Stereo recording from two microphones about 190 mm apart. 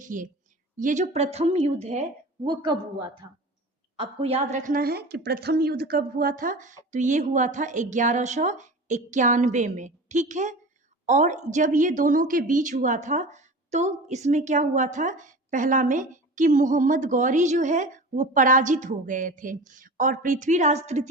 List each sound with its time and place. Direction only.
0.0 s a woman's voice: 45° right (ahead or behind)